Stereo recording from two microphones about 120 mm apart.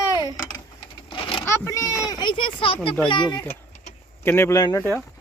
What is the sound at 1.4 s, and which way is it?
Speech, 25° left (ahead or behind).